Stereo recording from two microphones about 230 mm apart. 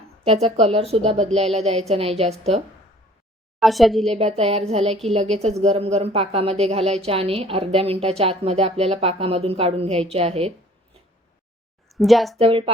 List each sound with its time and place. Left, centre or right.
0.3 s speech: right
3.6 s a woman's voice: centre
4.1 s speech: right
11.9 s speech: centre
12.4 s speech: right